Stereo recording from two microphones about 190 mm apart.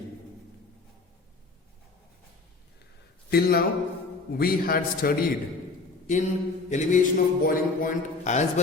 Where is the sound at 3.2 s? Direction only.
55° left (ahead or behind).